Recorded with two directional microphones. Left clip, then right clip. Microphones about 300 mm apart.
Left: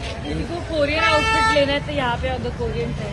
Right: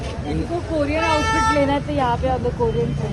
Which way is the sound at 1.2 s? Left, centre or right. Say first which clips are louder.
Left 1 dB; right.